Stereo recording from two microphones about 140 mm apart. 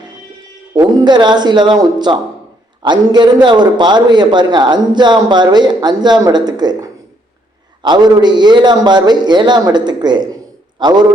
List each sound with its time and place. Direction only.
0.8 s a man's voice: 30° right (ahead or behind)